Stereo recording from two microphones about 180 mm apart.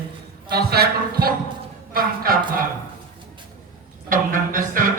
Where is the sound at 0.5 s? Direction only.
60° right (ahead or behind).